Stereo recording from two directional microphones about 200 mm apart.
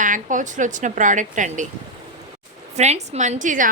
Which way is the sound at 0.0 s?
40° right (ahead or behind).